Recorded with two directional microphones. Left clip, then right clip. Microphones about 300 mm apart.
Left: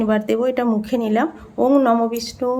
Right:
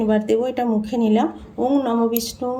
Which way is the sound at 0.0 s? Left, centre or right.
Centre.